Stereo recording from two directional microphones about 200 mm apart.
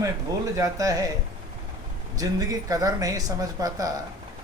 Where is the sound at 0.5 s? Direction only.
15° right (ahead or behind).